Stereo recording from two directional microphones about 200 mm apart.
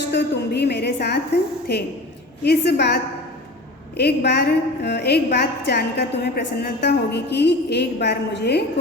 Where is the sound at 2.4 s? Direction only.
55° left (ahead or behind).